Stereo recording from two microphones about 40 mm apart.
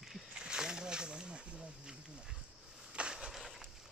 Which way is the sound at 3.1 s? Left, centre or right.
Centre.